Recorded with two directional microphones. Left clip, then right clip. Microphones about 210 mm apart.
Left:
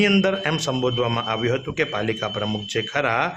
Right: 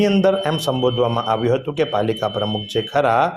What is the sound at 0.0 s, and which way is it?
A man's voice, centre (ahead or behind).